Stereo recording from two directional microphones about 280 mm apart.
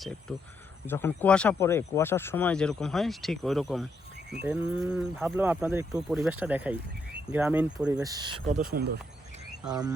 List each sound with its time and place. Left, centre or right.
0.9 s speech: centre; by 8.9 s right
9.6 s speech: centre